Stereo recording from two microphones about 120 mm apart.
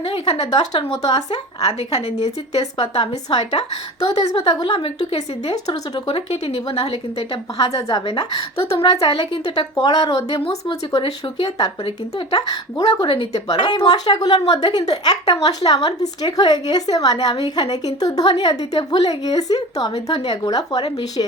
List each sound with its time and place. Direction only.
0.0 s speech: 50° left (ahead or behind)
1.0 s a woman's voice: 35° left (ahead or behind)
1.9 s a woman's voice: 60° left (ahead or behind)
2.6 s a woman's voice: 40° left (ahead or behind)
6.1 s a woman's voice: 55° left (ahead or behind)
7.7 s a woman's voice: 30° left (ahead or behind)
8.0 s a woman's voice: 45° left (ahead or behind)
9.7 s a woman's voice: 35° left (ahead or behind)
12.3 s a woman's voice: 35° left (ahead or behind)
13.0 s a woman's voice: 45° left (ahead or behind)
13.5 s a woman's voice: 35° left (ahead or behind)